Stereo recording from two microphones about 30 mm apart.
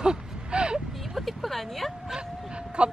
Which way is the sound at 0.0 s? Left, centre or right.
Right.